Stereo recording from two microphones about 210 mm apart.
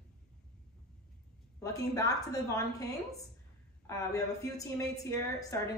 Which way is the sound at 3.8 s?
15° left (ahead or behind).